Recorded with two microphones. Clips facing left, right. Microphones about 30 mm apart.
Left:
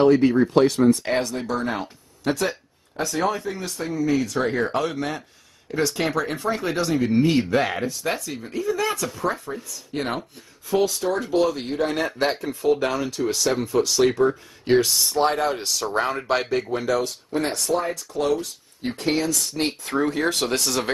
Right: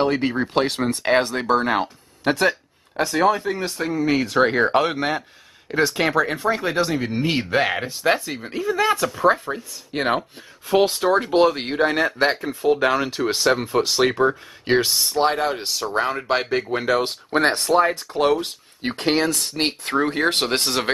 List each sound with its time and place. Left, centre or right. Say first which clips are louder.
0.0 s speech: left 4 dB; right
3.4 s speech: right 4 dB; right
5.7 s speech: right 3 dB; right
7.2 s speech: even; right
10.7 s speech: right 4 dB; right
11.7 s speech: right 4 dB; right
12.9 s speech: right 3 dB; right
16.7 s speech: right 5 dB; right